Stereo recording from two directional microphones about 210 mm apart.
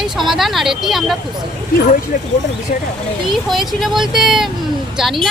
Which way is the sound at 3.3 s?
Centre (ahead or behind).